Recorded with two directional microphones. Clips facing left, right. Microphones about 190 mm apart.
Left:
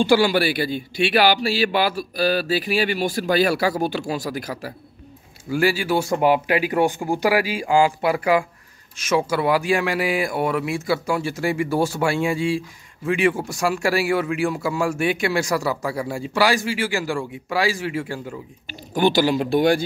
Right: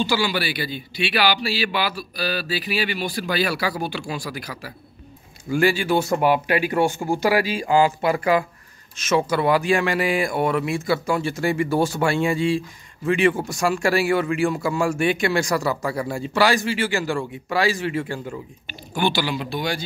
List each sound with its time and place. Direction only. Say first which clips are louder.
0.0 s a man's voice: left 6 dB; 55° left (ahead or behind)
5.5 s speech: right 1 dB; 5° left (ahead or behind)
18.7 s a man's voice: left 4 dB; 40° left (ahead or behind)